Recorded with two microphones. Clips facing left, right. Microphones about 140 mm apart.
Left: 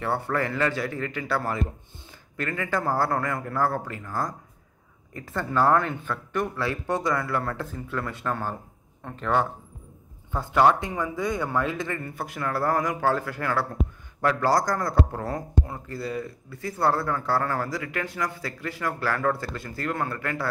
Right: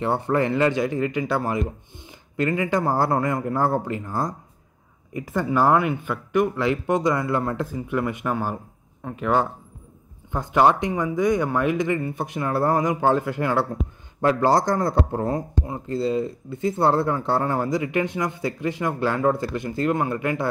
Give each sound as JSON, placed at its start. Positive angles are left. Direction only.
{"t": 0.0, "sound": "speech", "side_deg": -20}